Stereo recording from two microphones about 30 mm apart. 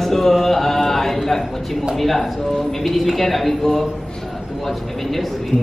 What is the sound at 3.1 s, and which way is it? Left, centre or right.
Speech, centre.